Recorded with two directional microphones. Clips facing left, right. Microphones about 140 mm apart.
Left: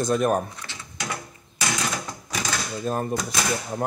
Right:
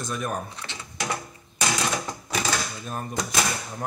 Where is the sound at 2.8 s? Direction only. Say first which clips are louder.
Left 7 dB; 35° left (ahead or behind).